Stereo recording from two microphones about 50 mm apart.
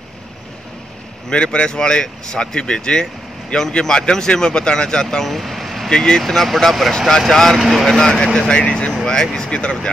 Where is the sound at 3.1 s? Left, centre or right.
Centre.